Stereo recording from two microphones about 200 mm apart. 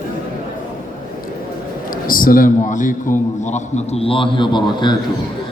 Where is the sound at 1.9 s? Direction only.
45° left (ahead or behind); by 4.9 s 20° left (ahead or behind).